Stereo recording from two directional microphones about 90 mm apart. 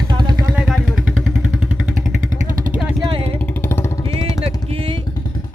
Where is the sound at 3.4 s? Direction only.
25° left (ahead or behind).